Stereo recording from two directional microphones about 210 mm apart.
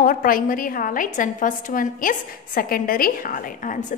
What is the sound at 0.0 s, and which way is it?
A woman's voice, 40° left (ahead or behind).